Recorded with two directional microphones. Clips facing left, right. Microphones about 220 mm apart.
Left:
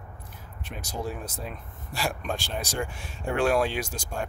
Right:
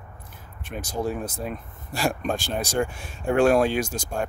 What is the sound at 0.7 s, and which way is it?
Speech, 50° right (ahead or behind).